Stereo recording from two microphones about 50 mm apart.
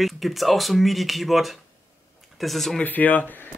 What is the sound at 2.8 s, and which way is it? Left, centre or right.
Speech, left.